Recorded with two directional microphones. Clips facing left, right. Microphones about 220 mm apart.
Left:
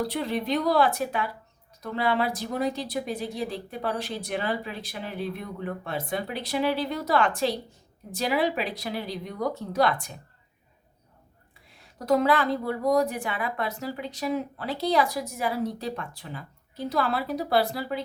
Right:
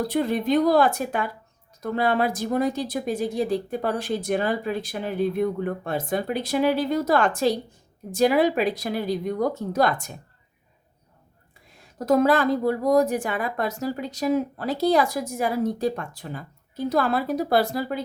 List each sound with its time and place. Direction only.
0.1 s a woman's voice: 50° right (ahead or behind)
11.9 s a woman's voice: 45° right (ahead or behind)